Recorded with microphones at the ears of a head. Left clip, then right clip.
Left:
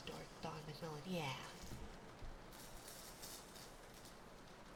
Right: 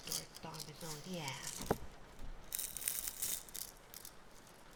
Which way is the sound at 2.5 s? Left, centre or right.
Right.